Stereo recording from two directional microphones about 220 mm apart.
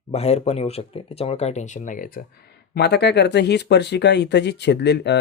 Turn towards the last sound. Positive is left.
turn(degrees=50)  # may be behind; listen again after turning